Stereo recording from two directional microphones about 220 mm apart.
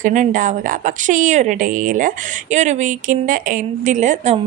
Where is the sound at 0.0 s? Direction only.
35° right (ahead or behind).